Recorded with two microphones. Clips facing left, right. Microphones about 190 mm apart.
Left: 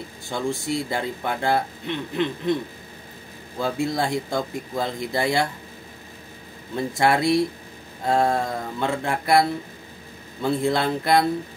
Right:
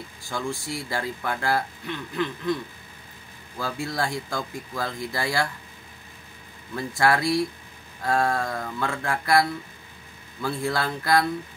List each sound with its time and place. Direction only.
0.3 s speech: 20° left (ahead or behind)
3.5 s speech: 20° left (ahead or behind)
6.7 s speech: 25° left (ahead or behind)